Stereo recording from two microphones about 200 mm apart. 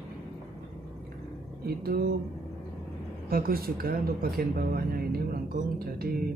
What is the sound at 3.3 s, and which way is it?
Speech, 50° right (ahead or behind).